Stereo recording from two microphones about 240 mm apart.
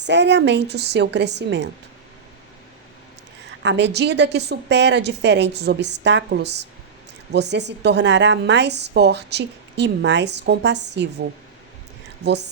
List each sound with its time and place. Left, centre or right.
0.0 s a woman's voice: right
3.6 s a woman's voice: right